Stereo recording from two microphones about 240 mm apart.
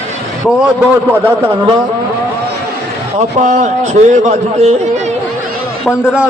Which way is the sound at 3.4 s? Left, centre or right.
Right.